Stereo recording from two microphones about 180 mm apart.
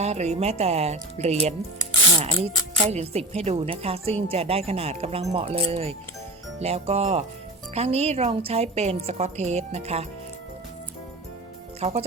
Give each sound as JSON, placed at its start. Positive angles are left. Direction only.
{"t": 0.0, "sound": "speech", "side_deg": -35}
{"t": 11.8, "sound": "speech", "side_deg": -35}